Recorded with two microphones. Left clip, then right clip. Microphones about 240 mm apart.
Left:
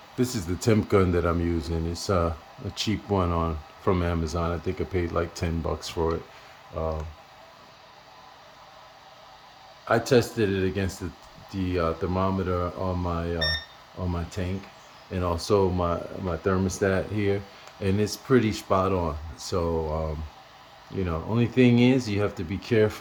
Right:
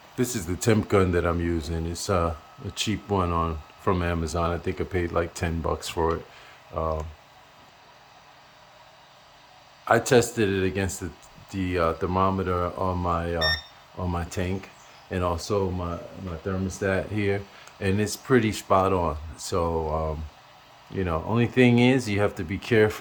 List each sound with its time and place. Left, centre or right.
0.2 s speech: centre
9.8 s speech: centre